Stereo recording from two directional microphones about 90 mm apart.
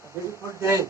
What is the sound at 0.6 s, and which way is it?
Speech, 30° right (ahead or behind).